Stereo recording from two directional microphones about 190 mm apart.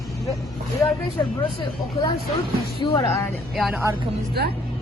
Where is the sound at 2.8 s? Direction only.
25° left (ahead or behind).